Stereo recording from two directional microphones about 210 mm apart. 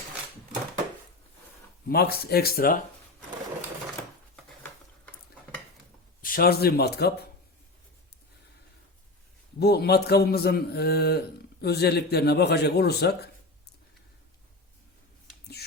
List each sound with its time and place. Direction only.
1.9 s a man's voice: 50° left (ahead or behind)
6.2 s a man's voice: 45° left (ahead or behind)
9.6 s a man's voice: 50° left (ahead or behind)